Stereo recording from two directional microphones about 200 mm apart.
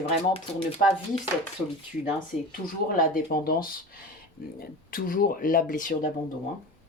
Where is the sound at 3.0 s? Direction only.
45° left (ahead or behind).